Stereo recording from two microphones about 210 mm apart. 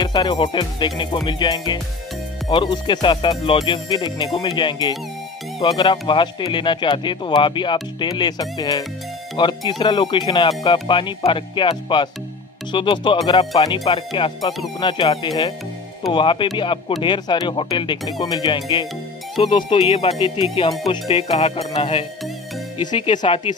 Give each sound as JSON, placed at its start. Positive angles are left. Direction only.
{"t": 0.0, "sound": "speech", "side_deg": 20}